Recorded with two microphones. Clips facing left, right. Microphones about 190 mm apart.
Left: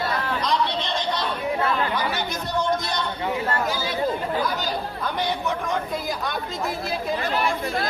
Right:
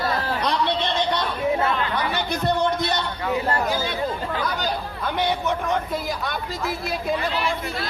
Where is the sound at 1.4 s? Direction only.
25° right (ahead or behind).